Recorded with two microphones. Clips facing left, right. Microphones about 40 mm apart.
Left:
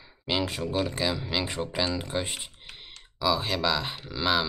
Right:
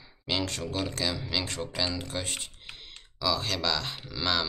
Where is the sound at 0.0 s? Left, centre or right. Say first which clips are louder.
Left 2 dB; centre.